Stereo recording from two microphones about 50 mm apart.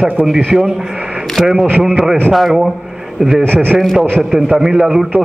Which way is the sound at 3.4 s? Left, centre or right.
Right.